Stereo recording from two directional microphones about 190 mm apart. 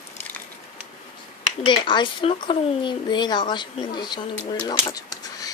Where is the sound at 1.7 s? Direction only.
25° left (ahead or behind).